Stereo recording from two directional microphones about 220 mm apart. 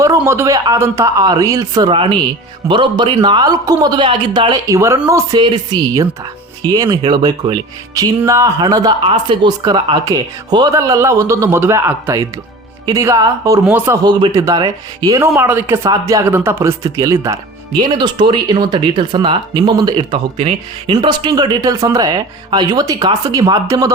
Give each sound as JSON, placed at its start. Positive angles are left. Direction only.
{"t": 0.0, "sound": "speech", "side_deg": -15}